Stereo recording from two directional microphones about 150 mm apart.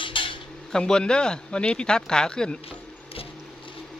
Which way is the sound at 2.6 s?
40° left (ahead or behind).